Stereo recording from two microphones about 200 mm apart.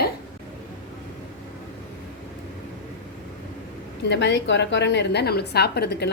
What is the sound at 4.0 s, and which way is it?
A woman's voice, 65° left (ahead or behind).